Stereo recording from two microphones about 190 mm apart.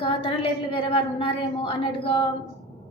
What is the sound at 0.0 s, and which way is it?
A woman's voice, 25° left (ahead or behind).